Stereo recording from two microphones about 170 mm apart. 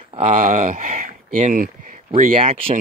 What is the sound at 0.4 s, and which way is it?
Speech, 50° right (ahead or behind).